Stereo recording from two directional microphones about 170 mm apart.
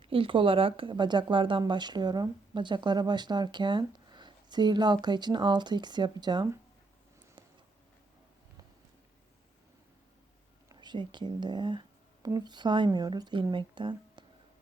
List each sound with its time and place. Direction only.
0.0 s speech: 30° right (ahead or behind)
10.7 s speech: 25° right (ahead or behind)